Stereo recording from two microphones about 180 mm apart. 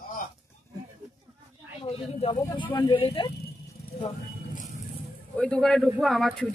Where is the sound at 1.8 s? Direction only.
35° left (ahead or behind).